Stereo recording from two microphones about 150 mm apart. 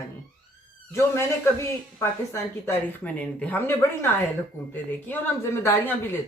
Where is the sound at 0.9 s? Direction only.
15° left (ahead or behind).